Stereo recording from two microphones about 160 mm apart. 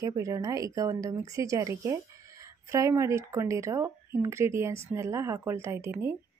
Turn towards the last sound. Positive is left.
turn(degrees=-15)  # may be behind; listen again after turning